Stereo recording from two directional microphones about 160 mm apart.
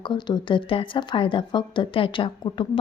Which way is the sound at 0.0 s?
30° left (ahead or behind).